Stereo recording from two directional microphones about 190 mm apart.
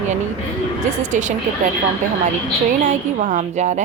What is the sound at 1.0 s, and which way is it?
Speech, 40° right (ahead or behind).